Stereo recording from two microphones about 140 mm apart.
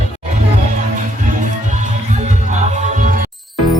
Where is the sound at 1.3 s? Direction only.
60° right (ahead or behind).